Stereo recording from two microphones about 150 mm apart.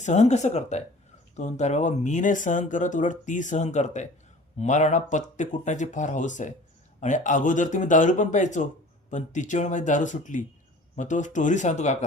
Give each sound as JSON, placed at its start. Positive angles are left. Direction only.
{"t": 0.0, "sound": "speech", "side_deg": 50}